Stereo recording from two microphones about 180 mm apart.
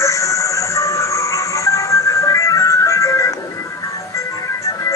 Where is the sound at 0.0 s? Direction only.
15° left (ahead or behind).